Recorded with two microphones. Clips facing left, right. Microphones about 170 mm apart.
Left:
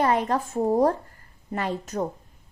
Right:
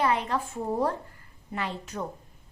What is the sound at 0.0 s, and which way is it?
A woman's voice, 45° left (ahead or behind).